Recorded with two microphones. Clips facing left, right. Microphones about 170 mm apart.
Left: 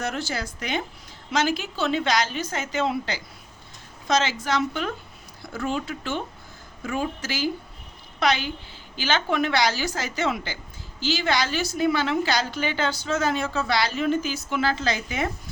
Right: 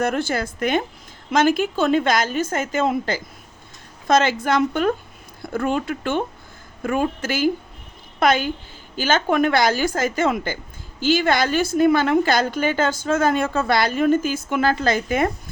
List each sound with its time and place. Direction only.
0.0 s a woman's voice: 55° right (ahead or behind)